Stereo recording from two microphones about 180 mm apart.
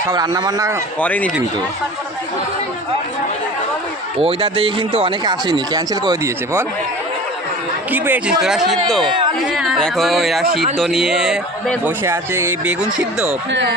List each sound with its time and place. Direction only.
0.1 s speech: 20° right (ahead or behind)
0.9 s speech: 10° left (ahead or behind)
4.2 s speech: 30° right (ahead or behind)
7.9 s a man's voice: 10° right (ahead or behind)
12.0 s a man's voice: 15° right (ahead or behind)
13.5 s speech: 80° right